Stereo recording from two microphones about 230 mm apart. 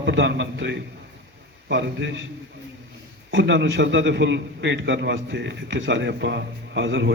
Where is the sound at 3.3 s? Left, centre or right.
Right.